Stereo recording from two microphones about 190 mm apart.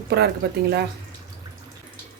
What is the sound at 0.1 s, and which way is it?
Speech, 60° right (ahead or behind).